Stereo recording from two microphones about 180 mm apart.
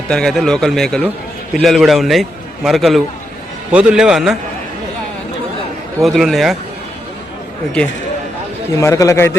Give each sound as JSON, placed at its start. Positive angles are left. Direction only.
{"t": 0.1, "sound": "a man's voice", "side_deg": 5}
{"t": 6.0, "sound": "a man's voice", "side_deg": 0}
{"t": 8.8, "sound": "a man's voice", "side_deg": 15}